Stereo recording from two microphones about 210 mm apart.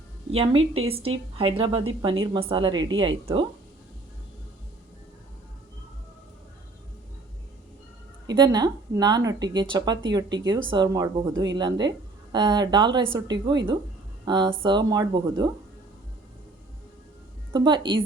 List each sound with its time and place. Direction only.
0.3 s speech: 25° right (ahead or behind)
8.3 s speech: 20° right (ahead or behind)
17.5 s speech: 20° right (ahead or behind)